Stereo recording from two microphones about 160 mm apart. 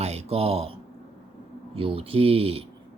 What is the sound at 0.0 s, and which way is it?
Speech, 40° right (ahead or behind).